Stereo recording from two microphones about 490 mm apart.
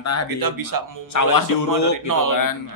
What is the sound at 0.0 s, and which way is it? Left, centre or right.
Speech, left.